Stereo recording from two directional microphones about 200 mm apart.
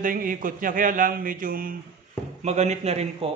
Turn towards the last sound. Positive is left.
turn(degrees=-30)  # may be behind; listen again after turning